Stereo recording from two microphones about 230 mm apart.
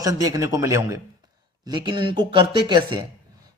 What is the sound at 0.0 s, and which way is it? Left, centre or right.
A man's voice, centre.